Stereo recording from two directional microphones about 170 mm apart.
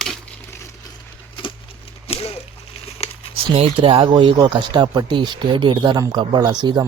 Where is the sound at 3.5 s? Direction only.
35° right (ahead or behind).